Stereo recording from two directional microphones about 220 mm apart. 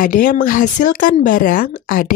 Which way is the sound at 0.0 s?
40° left (ahead or behind).